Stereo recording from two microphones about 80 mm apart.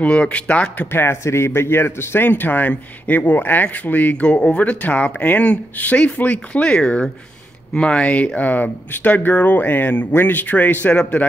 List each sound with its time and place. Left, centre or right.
0.0 s speech: centre
0.9 s speech: left